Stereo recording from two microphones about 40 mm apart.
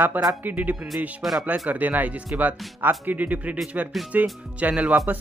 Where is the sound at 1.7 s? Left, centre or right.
Right.